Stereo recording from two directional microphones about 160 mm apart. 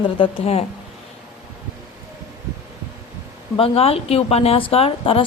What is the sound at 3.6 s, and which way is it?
Speech, 40° left (ahead or behind).